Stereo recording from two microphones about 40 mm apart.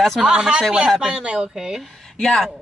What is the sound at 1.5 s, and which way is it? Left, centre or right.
Speech, centre.